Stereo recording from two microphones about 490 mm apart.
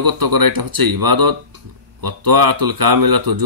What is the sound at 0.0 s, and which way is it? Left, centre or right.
Speech, right.